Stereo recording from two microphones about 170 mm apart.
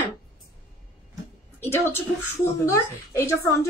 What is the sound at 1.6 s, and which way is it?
A woman's voice, 15° left (ahead or behind).